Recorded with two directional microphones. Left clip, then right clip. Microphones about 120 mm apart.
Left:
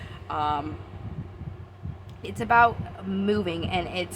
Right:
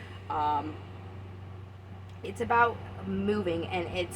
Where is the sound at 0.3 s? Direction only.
45° left (ahead or behind).